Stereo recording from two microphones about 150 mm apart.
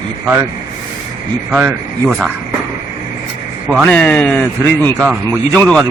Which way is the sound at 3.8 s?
5° left (ahead or behind).